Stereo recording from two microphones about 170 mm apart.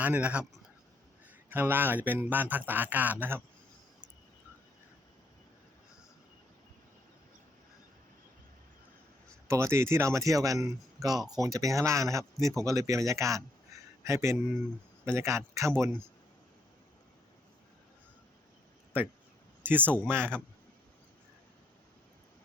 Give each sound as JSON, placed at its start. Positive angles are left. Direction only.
{"t": 0.0, "sound": "speech", "side_deg": -10}
{"t": 9.5, "sound": "speech", "side_deg": -15}
{"t": 19.6, "sound": "speech", "side_deg": -10}